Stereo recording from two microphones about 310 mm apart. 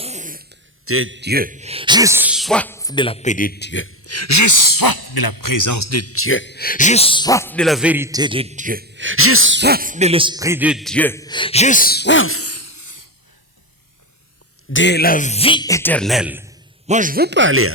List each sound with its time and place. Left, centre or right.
0.0 s a sound: right
0.9 s speech: right; by 13.1 s left
14.7 s speech: left; by 16.5 s centre
16.8 s speech: right